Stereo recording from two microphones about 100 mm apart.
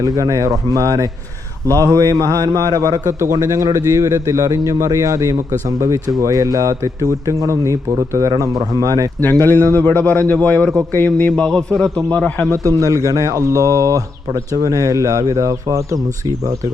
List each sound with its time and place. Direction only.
0.0 s speech: 35° right (ahead or behind)
9.2 s a man's voice: 20° left (ahead or behind)
12.8 s speech: 35° right (ahead or behind)